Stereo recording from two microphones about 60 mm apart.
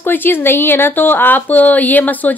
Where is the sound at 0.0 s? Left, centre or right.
Left.